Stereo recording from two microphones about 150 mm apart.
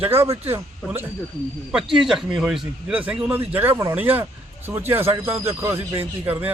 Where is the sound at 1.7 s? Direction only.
5° right (ahead or behind).